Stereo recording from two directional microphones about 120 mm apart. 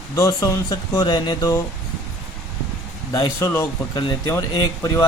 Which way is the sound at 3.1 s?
25° left (ahead or behind).